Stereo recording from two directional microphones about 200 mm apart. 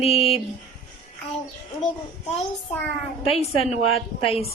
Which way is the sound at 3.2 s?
30° left (ahead or behind).